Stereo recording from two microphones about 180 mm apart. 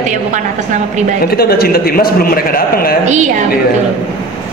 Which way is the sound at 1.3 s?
60° left (ahead or behind).